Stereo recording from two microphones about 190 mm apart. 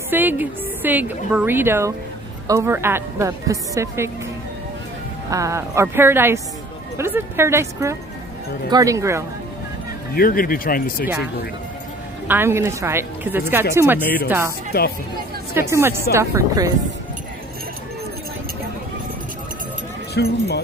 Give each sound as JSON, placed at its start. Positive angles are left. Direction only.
{"t": 0.1, "sound": "a woman's voice", "side_deg": -10}
{"t": 5.3, "sound": "a woman's voice", "side_deg": -15}
{"t": 10.1, "sound": "speech", "side_deg": 50}
{"t": 12.3, "sound": "a woman's voice", "side_deg": -10}
{"t": 15.5, "sound": "a woman's voice", "side_deg": -15}
{"t": 20.2, "sound": "speech", "side_deg": 60}